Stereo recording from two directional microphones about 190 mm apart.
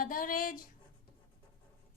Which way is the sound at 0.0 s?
45° left (ahead or behind).